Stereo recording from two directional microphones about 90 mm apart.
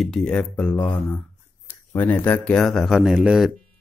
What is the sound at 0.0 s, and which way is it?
Speech, 5° left (ahead or behind).